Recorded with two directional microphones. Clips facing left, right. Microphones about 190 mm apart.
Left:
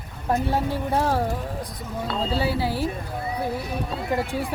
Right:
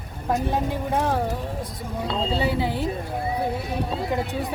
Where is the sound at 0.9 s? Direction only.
5° left (ahead or behind).